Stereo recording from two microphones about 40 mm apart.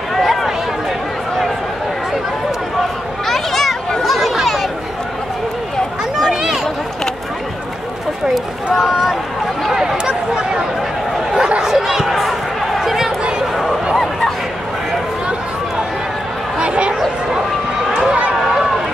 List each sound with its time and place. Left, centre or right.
2.8 s chatter: centre
8.7 s a sound: centre
11.3 s chatter: centre
12.1 s a sound: centre
16.5 s chatter: right
17.8 s run: centre